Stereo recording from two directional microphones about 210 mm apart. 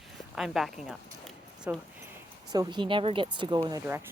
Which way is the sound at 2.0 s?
15° right (ahead or behind).